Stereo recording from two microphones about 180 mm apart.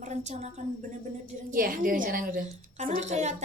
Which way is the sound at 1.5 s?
50° right (ahead or behind).